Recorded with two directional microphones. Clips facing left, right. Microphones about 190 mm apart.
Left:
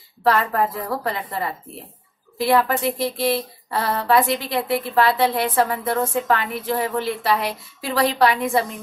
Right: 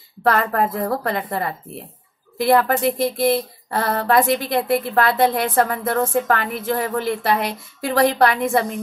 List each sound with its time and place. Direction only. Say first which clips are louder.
0.2 s speech: right 1 dB; 50° right (ahead or behind)